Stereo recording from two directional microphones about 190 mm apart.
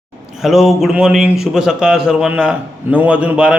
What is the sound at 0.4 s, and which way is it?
A man's voice, centre (ahead or behind).